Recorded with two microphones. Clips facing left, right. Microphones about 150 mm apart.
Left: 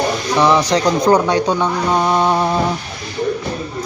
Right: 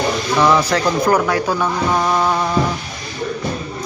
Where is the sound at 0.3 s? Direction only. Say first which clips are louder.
Left 1 dB; 15° left (ahead or behind).